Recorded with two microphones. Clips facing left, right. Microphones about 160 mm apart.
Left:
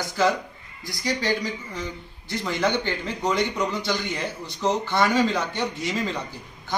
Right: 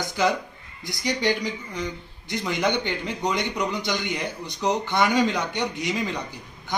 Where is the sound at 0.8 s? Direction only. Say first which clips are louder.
Right 1 dB; 20° right (ahead or behind).